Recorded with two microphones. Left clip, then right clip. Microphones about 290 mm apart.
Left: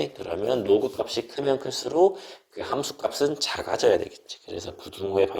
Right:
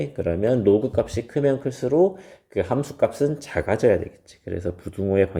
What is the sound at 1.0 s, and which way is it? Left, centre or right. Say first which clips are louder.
Speech: right 4 dB; centre.